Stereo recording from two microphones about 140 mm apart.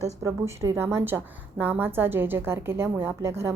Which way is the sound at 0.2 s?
20° right (ahead or behind).